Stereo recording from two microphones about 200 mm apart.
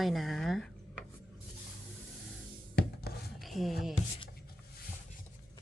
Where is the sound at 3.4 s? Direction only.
Centre (ahead or behind).